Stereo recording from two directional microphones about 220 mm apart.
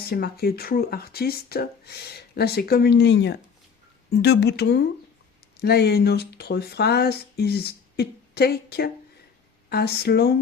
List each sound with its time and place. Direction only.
0.0 s speech: 45° left (ahead or behind)